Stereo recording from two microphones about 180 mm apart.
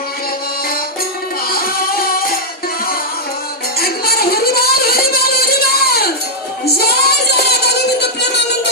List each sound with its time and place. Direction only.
1.5 s music: 55° left (ahead or behind)
3.8 s music: 55° left (ahead or behind)
6.7 s a sound: 60° left (ahead or behind)